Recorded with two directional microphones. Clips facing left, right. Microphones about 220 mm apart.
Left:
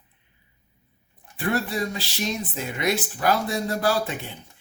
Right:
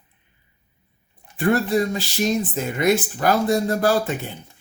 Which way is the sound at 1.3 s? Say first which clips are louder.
Right 7 dB; 50° right (ahead or behind).